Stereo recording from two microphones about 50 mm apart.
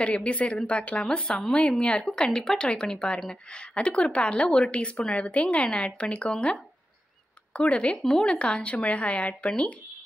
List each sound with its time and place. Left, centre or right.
0.0 s speech: left